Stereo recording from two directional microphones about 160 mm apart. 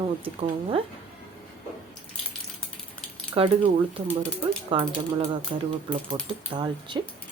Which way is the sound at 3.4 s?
35° right (ahead or behind).